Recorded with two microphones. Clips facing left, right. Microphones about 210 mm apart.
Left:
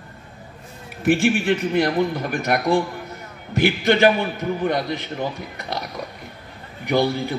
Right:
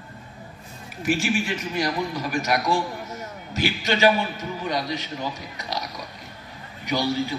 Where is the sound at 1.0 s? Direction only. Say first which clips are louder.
Left 5 dB; 55° left (ahead or behind).